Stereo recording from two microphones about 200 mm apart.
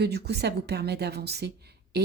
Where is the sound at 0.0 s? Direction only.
55° right (ahead or behind).